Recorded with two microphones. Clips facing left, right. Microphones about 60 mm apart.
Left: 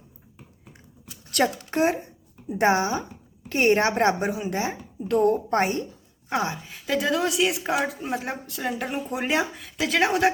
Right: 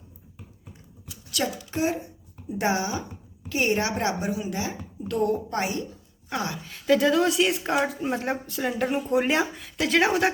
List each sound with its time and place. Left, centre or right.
1.3 s a woman's voice: left
6.3 s a woman's voice: left
6.6 s speech: centre